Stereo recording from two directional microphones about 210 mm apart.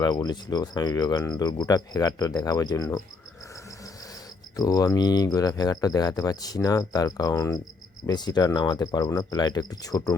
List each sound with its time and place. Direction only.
0.0 s speech: 20° left (ahead or behind)
4.5 s speech: 15° left (ahead or behind)